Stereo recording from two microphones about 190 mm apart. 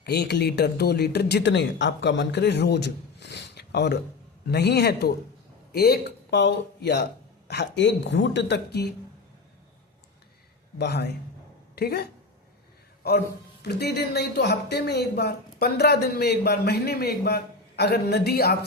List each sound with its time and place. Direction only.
0.0 s speech: 60° left (ahead or behind)
10.8 s speech: 60° left (ahead or behind)
13.0 s speech: 55° left (ahead or behind)